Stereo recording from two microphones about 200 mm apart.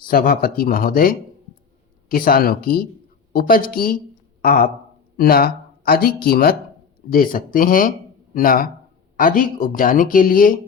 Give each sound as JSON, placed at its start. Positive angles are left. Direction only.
{"t": 0.1, "sound": "speech", "side_deg": 45}